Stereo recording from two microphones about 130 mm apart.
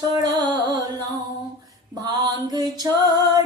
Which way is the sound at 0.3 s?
30° right (ahead or behind).